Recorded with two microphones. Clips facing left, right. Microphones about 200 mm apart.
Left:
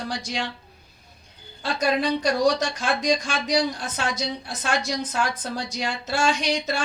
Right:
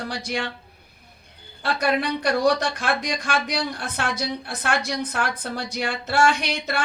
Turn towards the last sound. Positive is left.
turn(degrees=-60)  # may be behind; listen again after turning